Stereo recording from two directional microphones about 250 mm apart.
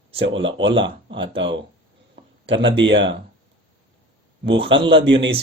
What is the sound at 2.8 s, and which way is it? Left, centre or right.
Speech, right.